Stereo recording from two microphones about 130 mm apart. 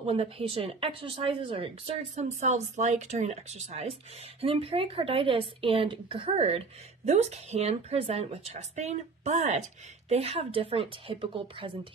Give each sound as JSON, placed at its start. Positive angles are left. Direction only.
{"t": 0.0, "sound": "a woman's voice", "side_deg": -50}